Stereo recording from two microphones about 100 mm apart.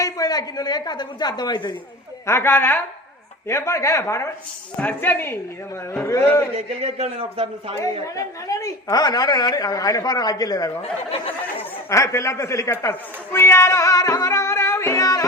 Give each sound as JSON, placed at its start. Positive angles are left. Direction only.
{"t": 0.0, "sound": "a woman's voice", "side_deg": 40}
{"t": 2.2, "sound": "speech", "side_deg": 25}
{"t": 4.8, "sound": "speech", "side_deg": 20}
{"t": 6.6, "sound": "a man's voice", "side_deg": -90}
{"t": 8.0, "sound": "a woman's voice", "side_deg": 35}
{"t": 11.9, "sound": "speech", "side_deg": 30}